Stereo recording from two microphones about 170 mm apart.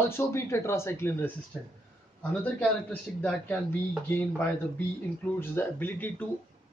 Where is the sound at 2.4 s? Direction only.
10° left (ahead or behind).